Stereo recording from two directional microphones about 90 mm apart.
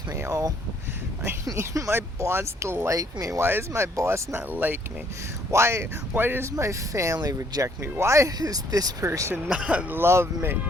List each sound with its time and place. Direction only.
0.2 s speech: 40° right (ahead or behind); by 4.8 s 20° right (ahead or behind)
5.5 s speech: 30° right (ahead or behind)
8.4 s speech: 45° right (ahead or behind)
9.3 s speech: 15° right (ahead or behind)
10.0 s speech: 30° right (ahead or behind)